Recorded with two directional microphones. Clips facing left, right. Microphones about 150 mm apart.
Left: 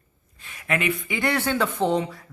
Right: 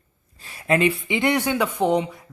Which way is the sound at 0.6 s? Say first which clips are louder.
Right 6 dB; 30° right (ahead or behind).